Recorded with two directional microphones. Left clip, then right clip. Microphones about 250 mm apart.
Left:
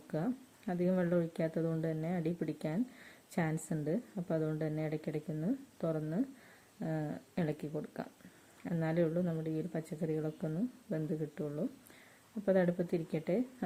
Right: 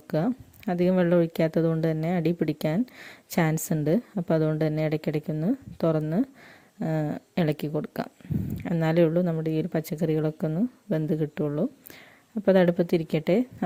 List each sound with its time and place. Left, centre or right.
0.1 s speech: right